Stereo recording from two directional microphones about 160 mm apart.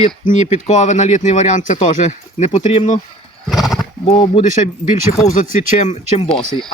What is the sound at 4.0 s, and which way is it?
Speech, 35° left (ahead or behind).